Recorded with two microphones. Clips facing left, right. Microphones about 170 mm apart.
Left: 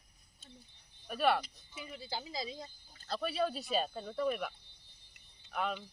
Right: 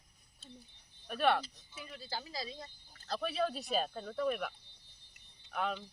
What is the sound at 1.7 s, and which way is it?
Speech, 15° left (ahead or behind).